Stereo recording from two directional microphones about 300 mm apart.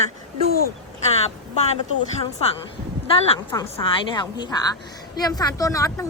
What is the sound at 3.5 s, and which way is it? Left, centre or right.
A woman's voice, centre.